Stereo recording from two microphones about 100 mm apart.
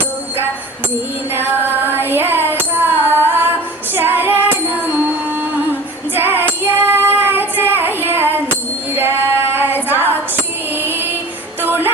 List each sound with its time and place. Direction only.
1.3 s music: 20° right (ahead or behind)
6.1 s child singing: 20° right (ahead or behind)
9.0 s female singing: 25° right (ahead or behind)
9.9 s music: 20° right (ahead or behind)